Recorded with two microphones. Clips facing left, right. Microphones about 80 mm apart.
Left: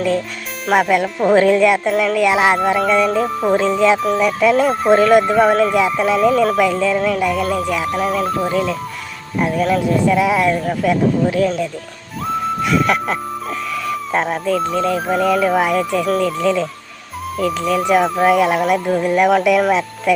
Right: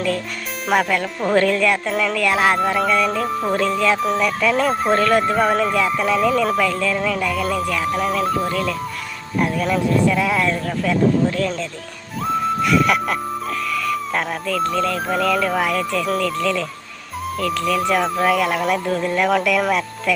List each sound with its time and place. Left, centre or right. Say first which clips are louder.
0.7 s speech: left 4 dB; centre
7.4 s speech: left 2 dB; centre
10.1 s speech: left 4 dB; centre
12.2 s music: even; centre
14.2 s speech: left 5 dB; left
14.6 s speech: left 2 dB; centre